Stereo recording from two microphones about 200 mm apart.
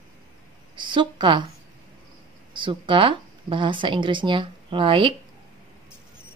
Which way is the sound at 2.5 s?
25° right (ahead or behind).